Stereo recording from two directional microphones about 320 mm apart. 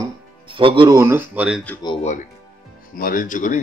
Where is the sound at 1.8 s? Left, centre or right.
Centre.